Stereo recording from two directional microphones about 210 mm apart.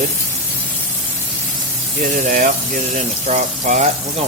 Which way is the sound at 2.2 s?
40° right (ahead or behind).